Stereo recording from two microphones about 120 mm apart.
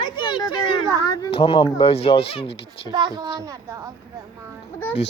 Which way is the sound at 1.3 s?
50° left (ahead or behind).